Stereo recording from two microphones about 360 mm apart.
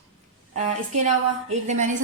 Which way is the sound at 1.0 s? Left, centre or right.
Centre.